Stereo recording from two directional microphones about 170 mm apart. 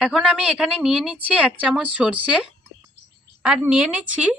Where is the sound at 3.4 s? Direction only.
5° right (ahead or behind).